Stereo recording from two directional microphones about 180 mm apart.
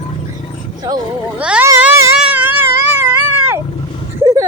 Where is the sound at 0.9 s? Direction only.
20° right (ahead or behind).